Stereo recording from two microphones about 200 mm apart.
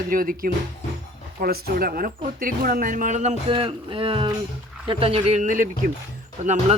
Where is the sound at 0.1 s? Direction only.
45° right (ahead or behind).